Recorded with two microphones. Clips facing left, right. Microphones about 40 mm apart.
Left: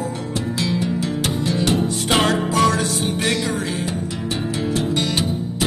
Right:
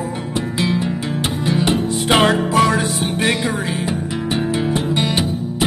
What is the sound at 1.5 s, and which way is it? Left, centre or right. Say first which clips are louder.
Music: right 3 dB; centre.